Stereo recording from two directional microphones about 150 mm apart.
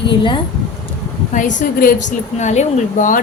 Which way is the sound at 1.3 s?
55° left (ahead or behind).